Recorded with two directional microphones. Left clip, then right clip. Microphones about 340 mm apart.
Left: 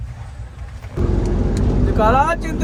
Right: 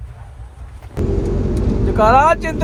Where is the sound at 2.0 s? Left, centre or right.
Centre.